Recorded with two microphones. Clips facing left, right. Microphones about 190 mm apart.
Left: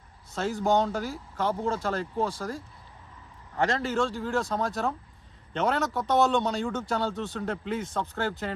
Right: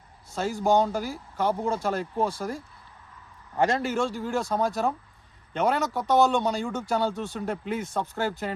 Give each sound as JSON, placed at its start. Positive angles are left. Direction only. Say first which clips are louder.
{"t": 0.3, "sound": "speech", "louder": "right 2 dB", "side_deg": -5}
{"t": 1.6, "sound": "speech", "louder": "right 2 dB", "side_deg": -15}
{"t": 3.6, "sound": "speech", "louder": "right 2 dB", "side_deg": -10}